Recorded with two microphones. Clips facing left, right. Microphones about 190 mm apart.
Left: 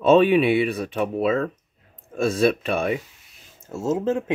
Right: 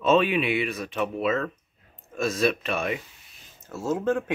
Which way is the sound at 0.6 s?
30° left (ahead or behind).